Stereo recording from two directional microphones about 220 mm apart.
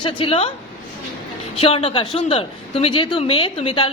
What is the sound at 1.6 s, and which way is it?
A woman's voice, 25° left (ahead or behind).